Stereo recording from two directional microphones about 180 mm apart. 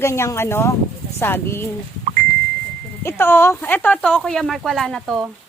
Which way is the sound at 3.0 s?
15° left (ahead or behind).